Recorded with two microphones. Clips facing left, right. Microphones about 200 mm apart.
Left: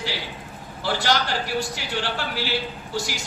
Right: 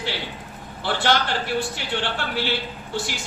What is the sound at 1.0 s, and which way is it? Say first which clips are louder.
A woman's voice: right 3 dB; 40° left (ahead or behind).